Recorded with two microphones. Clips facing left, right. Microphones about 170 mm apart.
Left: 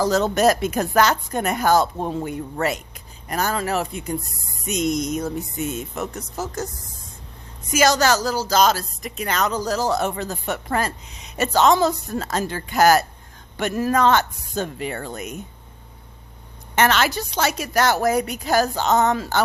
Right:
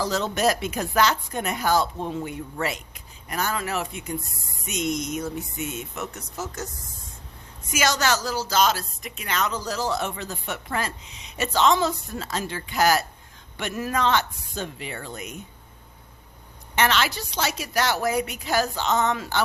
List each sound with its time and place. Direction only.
0.0 s a woman's voice: 45° left (ahead or behind)
7.7 s a woman's voice: 35° left (ahead or behind)
16.7 s a woman's voice: 45° left (ahead or behind)